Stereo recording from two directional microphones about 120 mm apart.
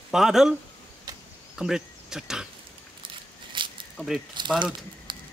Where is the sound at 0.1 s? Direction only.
5° right (ahead or behind).